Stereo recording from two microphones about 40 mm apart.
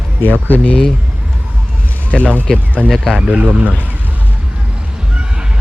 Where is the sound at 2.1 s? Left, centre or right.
Left.